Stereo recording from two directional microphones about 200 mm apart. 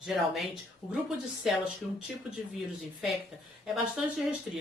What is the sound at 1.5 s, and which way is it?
Speech, centre (ahead or behind).